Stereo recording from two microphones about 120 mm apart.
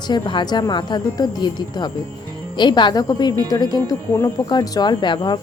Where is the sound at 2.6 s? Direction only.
40° left (ahead or behind).